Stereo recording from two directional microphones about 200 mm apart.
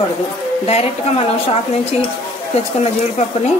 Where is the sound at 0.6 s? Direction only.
30° left (ahead or behind).